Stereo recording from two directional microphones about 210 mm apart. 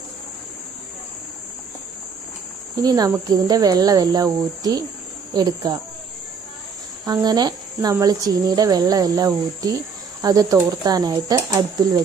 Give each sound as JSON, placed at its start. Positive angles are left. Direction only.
{"t": 2.8, "sound": "speech", "side_deg": -20}
{"t": 7.0, "sound": "speech", "side_deg": -15}